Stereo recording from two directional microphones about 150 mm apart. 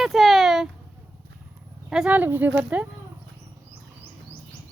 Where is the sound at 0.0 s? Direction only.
Centre (ahead or behind).